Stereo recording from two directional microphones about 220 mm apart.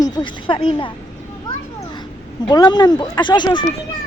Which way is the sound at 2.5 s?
20° left (ahead or behind).